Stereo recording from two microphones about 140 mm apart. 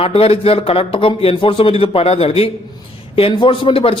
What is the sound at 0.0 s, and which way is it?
A man's voice, 40° left (ahead or behind).